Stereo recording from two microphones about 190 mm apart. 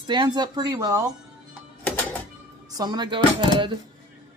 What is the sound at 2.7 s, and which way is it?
Speech, 20° right (ahead or behind).